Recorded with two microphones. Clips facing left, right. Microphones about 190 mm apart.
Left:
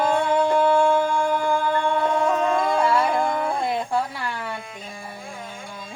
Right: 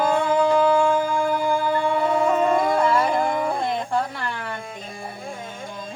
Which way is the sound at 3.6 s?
5° left (ahead or behind).